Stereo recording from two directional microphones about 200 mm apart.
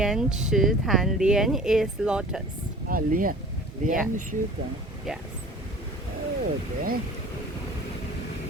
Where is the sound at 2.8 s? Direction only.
45° right (ahead or behind).